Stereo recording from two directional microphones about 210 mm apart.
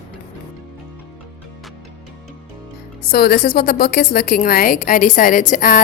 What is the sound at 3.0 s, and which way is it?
A woman's voice, 45° left (ahead or behind).